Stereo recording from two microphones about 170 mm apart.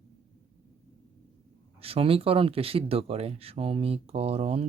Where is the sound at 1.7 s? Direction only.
35° right (ahead or behind).